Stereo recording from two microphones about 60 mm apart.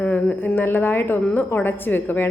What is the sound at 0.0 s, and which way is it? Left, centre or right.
A woman's voice, left.